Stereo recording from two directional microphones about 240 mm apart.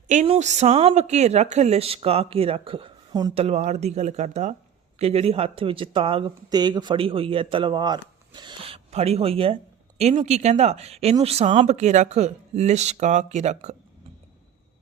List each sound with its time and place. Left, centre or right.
0.1 s speech: right